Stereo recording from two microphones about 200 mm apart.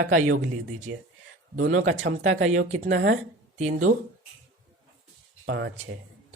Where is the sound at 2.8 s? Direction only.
80° right.